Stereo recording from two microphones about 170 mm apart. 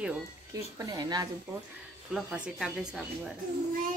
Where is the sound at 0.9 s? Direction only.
25° right (ahead or behind).